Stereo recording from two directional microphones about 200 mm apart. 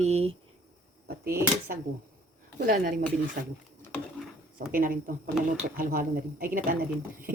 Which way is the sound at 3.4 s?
45° right (ahead or behind).